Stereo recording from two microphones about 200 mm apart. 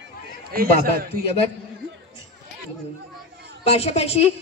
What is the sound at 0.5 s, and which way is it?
Speech, 50° right (ahead or behind).